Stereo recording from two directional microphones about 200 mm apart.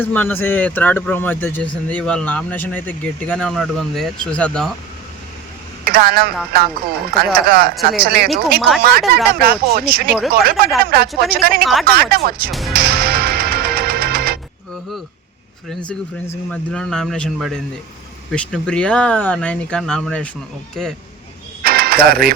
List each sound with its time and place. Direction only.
0.0 s speech: 10° left (ahead or behind)
5.8 s speech: 50° right (ahead or behind)
11.6 s speech: centre (ahead or behind)
11.9 s speech: 50° right (ahead or behind)
12.5 s speech: centre (ahead or behind)
12.7 s music: 50° right (ahead or behind)
15.9 s speech: 5° left (ahead or behind)
21.6 s mechanisms: 50° right (ahead or behind)